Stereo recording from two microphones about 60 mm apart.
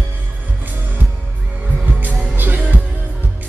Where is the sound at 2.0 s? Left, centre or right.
Right.